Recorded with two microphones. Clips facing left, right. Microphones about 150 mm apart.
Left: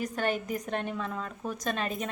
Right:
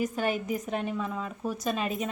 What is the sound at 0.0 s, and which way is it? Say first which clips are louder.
A woman's voice: right 2 dB; 5° right (ahead or behind).